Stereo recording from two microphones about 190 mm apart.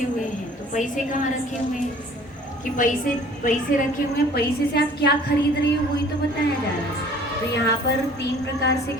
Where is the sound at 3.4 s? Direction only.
45° left (ahead or behind).